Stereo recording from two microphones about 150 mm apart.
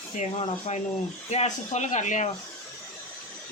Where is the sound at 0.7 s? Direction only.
50° left (ahead or behind).